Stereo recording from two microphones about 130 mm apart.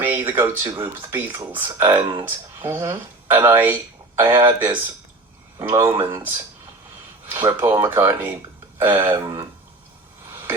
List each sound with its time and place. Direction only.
0.0 s speech: 15° right (ahead or behind)